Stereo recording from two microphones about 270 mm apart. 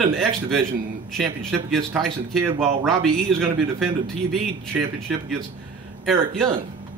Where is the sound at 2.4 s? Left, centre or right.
Centre.